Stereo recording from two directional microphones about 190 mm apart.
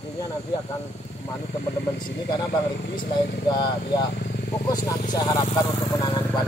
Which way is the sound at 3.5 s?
25° left (ahead or behind).